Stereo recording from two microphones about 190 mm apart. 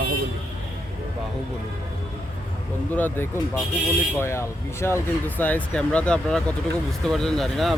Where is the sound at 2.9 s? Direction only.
10° left (ahead or behind).